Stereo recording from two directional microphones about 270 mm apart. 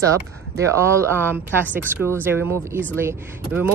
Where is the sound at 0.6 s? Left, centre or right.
Centre.